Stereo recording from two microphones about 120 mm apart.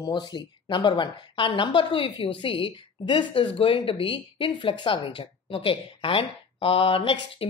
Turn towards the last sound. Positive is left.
turn(degrees=50)  # may be behind; listen again after turning